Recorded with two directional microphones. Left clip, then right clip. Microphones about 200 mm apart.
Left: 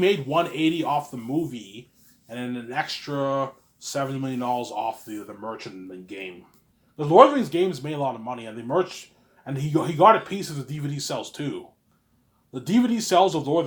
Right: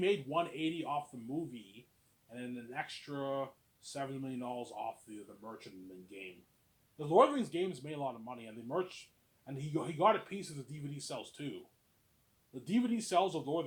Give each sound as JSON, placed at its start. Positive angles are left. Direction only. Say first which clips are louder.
{"t": 0.0, "sound": "speech", "louder": "left 12 dB", "side_deg": 25}
{"t": 2.3, "sound": "speech", "louder": "left 14 dB", "side_deg": 25}
{"t": 6.9, "sound": "speech", "louder": "left 13 dB", "side_deg": 20}